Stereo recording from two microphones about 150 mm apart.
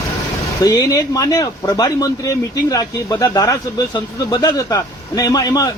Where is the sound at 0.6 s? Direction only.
25° left (ahead or behind).